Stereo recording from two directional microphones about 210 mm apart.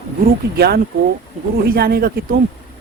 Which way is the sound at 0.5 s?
50° right (ahead or behind).